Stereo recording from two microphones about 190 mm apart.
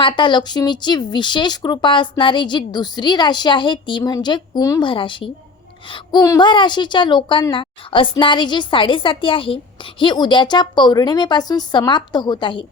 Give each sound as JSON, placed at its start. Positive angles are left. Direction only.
{"t": 0.0, "sound": "speech", "side_deg": 25}